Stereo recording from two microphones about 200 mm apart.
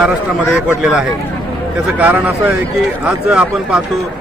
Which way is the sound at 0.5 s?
5° right (ahead or behind).